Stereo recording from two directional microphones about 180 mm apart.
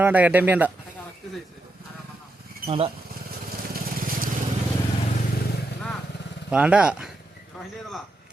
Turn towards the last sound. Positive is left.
turn(degrees=-5)  # may be behind; listen again after turning